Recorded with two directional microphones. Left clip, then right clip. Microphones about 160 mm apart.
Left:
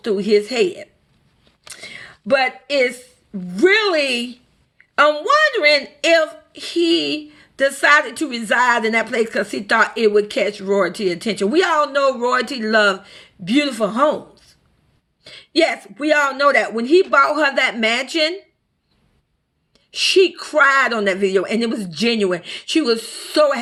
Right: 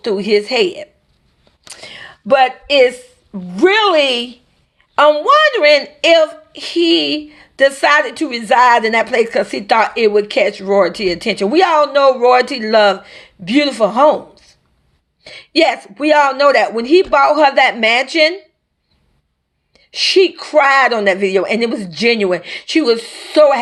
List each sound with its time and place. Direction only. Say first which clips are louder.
0.0 s a woman's voice: right 2 dB; 30° left (ahead or behind)
1.6 s whispering: right 3 dB; 25° left (ahead or behind)
2.9 s a woman's voice: right 4 dB; 30° left (ahead or behind)
19.7 s a woman's voice: right 3 dB; 35° left (ahead or behind)